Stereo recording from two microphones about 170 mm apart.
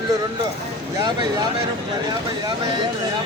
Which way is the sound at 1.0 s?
25° right (ahead or behind).